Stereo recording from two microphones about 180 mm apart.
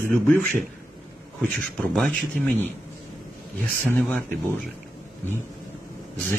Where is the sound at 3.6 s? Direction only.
5° left (ahead or behind).